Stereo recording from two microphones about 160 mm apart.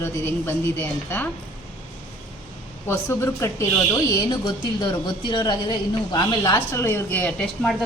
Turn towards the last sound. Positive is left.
turn(degrees=5)  # may be behind; listen again after turning